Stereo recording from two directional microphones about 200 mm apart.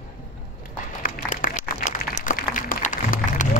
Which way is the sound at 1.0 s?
45° left (ahead or behind).